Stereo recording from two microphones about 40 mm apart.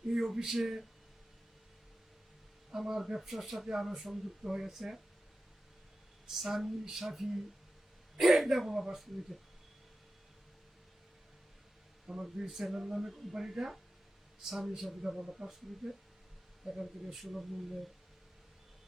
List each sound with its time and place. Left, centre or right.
0.1 s speech: centre
2.7 s speech: centre
6.2 s speech: centre
12.0 s speech: centre
12.5 s speech: centre